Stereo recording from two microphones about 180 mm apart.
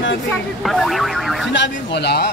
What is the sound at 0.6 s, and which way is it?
Speech, centre (ahead or behind).